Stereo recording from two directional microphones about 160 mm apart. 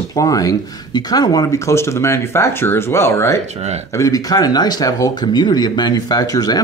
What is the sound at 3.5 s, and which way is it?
Speech, 40° right (ahead or behind).